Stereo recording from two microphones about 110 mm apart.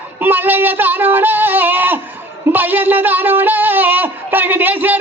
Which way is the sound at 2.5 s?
15° right (ahead or behind).